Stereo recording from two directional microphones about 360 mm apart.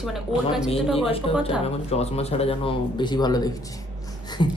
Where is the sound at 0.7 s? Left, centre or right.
Centre.